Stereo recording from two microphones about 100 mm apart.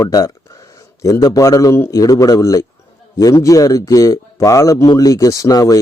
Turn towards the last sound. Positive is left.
turn(degrees=35)  # may be behind; listen again after turning